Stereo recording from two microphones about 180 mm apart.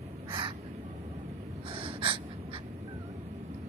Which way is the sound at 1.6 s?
30° right (ahead or behind).